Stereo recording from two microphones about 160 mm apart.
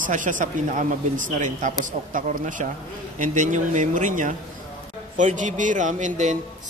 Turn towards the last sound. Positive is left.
turn(degrees=-50)  # may be behind; listen again after turning